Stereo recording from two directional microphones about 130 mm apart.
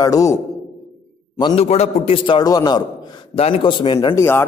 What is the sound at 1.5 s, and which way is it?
Speech, 55° left (ahead or behind).